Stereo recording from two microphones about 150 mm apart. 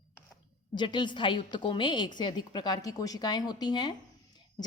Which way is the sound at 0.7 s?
30° left (ahead or behind).